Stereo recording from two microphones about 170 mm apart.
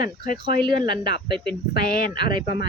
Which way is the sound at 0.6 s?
30° right (ahead or behind).